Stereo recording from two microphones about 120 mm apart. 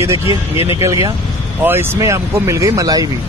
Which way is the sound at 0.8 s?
25° right (ahead or behind).